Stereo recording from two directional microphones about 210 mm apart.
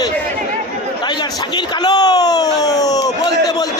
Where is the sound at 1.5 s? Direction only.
20° left (ahead or behind).